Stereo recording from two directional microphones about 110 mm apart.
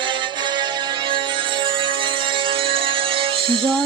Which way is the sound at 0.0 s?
45° right (ahead or behind).